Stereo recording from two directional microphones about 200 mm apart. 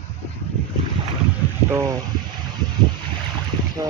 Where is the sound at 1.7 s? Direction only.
15° right (ahead or behind).